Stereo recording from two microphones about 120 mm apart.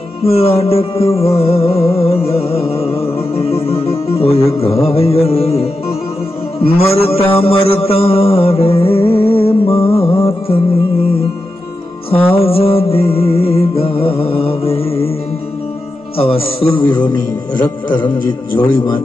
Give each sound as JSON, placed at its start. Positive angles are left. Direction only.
{"t": 0.2, "sound": "music", "side_deg": 55}
{"t": 6.6, "sound": "mantra", "side_deg": 55}
{"t": 12.1, "sound": "music", "side_deg": 50}
{"t": 16.2, "sound": "music", "side_deg": 50}